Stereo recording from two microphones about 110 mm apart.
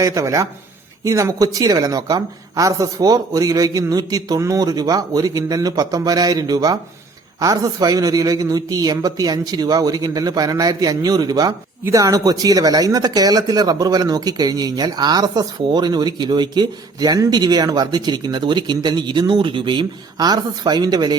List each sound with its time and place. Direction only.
0.0 s speech: 30° right (ahead or behind)